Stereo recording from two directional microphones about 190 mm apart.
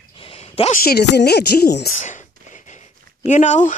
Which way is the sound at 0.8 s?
60° left (ahead or behind).